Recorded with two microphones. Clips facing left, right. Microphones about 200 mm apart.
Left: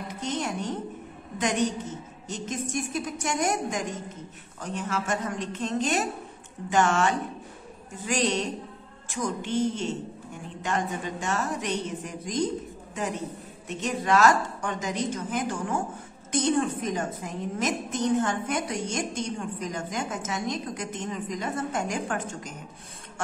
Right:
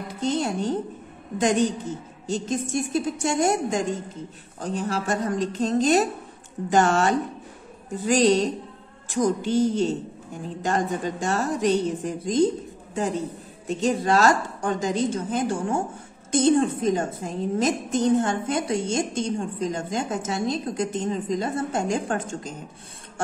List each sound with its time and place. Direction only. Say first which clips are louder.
0.1 s a woman's voice: right 7 dB; 30° right (ahead or behind)
13.7 s a woman's voice: right 5 dB; 30° right (ahead or behind)